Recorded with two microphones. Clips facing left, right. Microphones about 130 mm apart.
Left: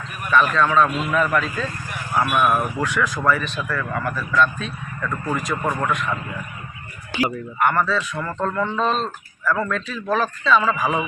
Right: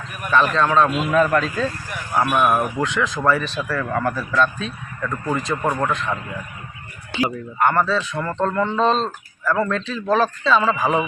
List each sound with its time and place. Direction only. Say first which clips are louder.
0.3 s a man's voice: even; 30° right (ahead or behind)
2.2 s speech: right 2 dB; 20° right (ahead or behind)
7.2 s speech: right 1 dB; 25° right (ahead or behind)